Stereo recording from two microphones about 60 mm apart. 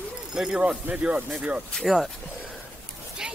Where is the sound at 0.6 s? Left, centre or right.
Right.